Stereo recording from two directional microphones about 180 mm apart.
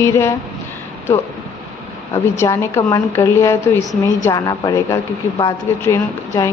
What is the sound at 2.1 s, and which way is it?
A woman's voice, 15° left (ahead or behind).